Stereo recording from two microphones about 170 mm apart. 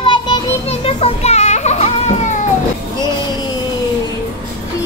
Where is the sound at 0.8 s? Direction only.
35° left (ahead or behind).